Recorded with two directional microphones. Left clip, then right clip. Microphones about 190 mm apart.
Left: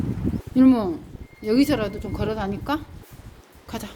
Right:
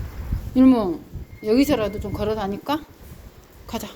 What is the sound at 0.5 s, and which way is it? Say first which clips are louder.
Speech: right 1 dB; 15° left (ahead or behind).